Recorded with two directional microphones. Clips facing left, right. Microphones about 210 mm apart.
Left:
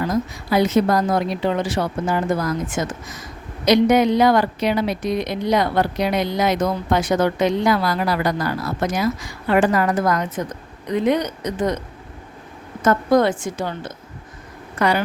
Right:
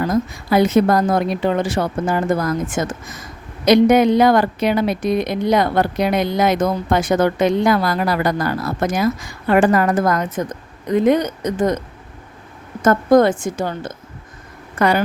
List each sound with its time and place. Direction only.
0.0 s speech: 50° right (ahead or behind)
12.8 s speech: 50° right (ahead or behind)